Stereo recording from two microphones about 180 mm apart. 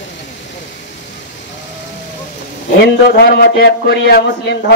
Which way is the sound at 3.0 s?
60° left (ahead or behind).